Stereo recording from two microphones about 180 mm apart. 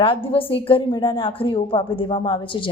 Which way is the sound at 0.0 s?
30° left (ahead or behind).